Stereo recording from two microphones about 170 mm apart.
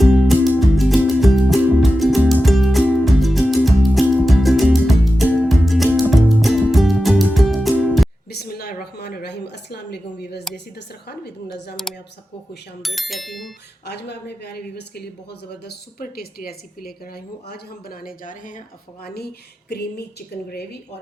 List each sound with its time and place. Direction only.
0.0 s music: centre (ahead or behind)
8.3 s a sound: 65° left (ahead or behind)
12.8 s speech: centre (ahead or behind)
13.8 s speech: 75° left (ahead or behind); by 18.6 s 50° left (ahead or behind)
19.0 s speech: 70° left (ahead or behind)